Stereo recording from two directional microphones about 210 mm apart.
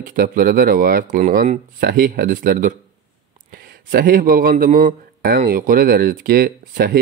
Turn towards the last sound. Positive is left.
turn(degrees=-45)  # may be behind; listen again after turning